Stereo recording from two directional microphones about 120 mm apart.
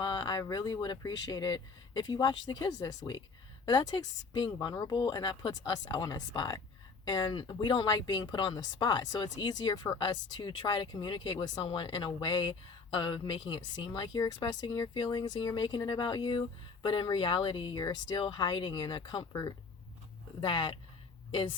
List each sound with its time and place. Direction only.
0.0 s speech: 40° left (ahead or behind)
19.3 s speech: 30° left (ahead or behind)
20.4 s speech: 40° left (ahead or behind)